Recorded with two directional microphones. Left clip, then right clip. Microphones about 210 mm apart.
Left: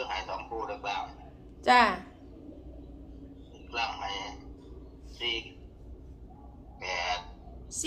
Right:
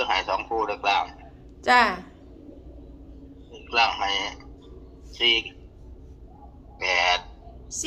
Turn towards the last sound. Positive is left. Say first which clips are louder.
# right 4 dB
turn(degrees=-5)  # may be behind; listen again after turning